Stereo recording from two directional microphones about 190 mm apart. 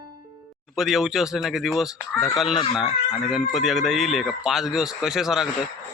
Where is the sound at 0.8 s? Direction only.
Centre (ahead or behind).